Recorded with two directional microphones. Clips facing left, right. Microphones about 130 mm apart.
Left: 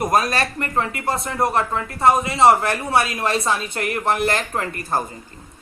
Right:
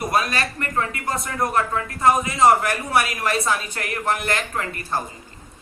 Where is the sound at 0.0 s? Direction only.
45° left (ahead or behind).